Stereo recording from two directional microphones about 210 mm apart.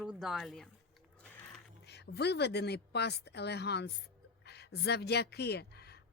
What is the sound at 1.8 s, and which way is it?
Speech, 55° left (ahead or behind).